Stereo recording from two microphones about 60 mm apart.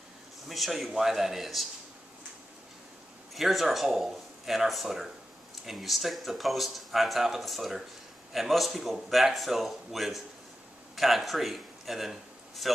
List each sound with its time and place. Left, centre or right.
0.5 s speech: centre
3.3 s a man's voice: centre